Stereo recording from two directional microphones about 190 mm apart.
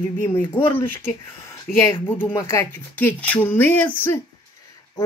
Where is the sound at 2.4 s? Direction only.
15° left (ahead or behind).